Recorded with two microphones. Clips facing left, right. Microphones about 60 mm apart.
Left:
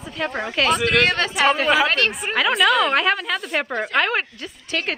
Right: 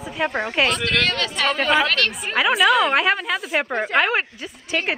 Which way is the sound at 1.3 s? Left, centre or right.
Centre.